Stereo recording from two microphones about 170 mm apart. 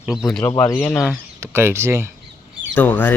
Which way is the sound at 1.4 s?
15° right (ahead or behind).